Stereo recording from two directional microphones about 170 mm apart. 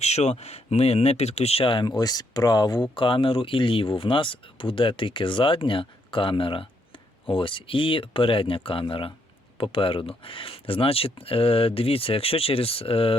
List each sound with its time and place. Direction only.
0.0 s speech: 40° left (ahead or behind)